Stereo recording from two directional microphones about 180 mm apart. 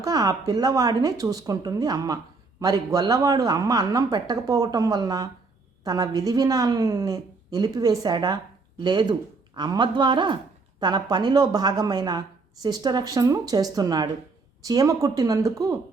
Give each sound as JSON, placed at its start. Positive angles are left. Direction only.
{"t": 0.0, "sound": "a woman's voice", "side_deg": -20}